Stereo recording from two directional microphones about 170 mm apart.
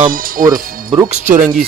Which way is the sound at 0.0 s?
55° right (ahead or behind).